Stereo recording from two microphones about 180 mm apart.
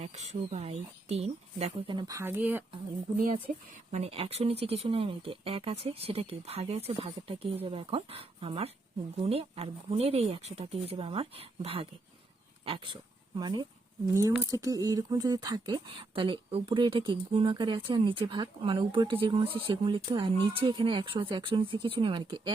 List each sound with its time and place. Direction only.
0.0 s speech: 35° right (ahead or behind); by 2.6 s 10° right (ahead or behind)
3.9 s speech: 35° right (ahead or behind)